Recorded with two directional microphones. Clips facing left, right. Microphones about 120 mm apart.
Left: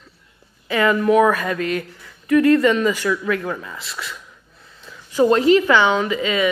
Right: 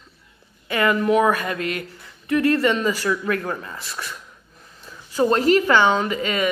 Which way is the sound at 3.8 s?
20° right (ahead or behind).